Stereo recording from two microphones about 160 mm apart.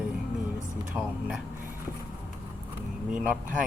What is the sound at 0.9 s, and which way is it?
Speech, 5° right (ahead or behind).